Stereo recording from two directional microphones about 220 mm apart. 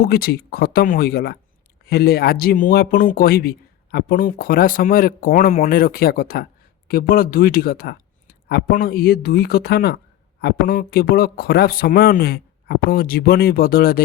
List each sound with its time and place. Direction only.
0.0 s speech: 45° left (ahead or behind)